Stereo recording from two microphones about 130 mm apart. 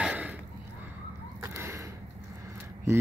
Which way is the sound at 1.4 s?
20° right (ahead or behind).